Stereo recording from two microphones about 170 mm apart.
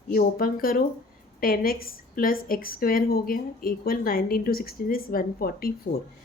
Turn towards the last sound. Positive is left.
turn(degrees=60)  # may be behind; listen again after turning